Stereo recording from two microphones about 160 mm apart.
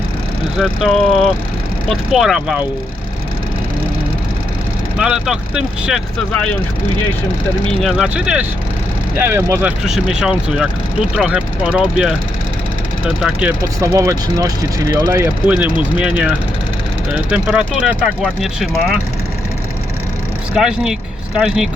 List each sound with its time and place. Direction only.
0.5 s speech: centre (ahead or behind)
4.9 s speech: 5° right (ahead or behind)
7.7 s speech: centre (ahead or behind)
13.7 s speech: 20° right (ahead or behind)
15.8 s speech: 5° right (ahead or behind)
20.5 s speech: 5° right (ahead or behind)